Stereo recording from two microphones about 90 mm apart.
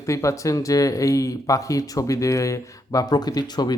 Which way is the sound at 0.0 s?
35° left (ahead or behind).